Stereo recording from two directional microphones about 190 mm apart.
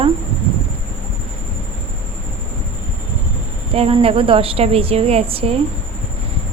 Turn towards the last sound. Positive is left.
turn(degrees=-30)  # may be behind; listen again after turning